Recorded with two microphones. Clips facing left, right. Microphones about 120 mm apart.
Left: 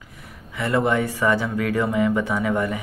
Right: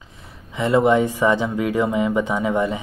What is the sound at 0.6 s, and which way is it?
Speech, 20° right (ahead or behind).